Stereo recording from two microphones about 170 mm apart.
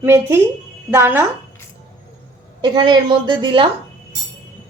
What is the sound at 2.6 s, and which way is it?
A woman's voice, 25° right (ahead or behind).